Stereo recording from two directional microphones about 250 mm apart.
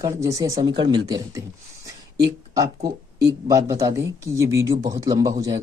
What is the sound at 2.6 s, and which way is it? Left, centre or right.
Speech, centre.